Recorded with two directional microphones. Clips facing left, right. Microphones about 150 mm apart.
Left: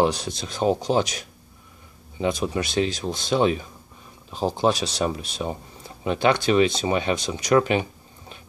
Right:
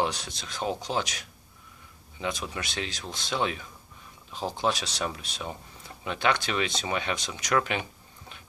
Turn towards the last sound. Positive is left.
turn(degrees=30)  # may be behind; listen again after turning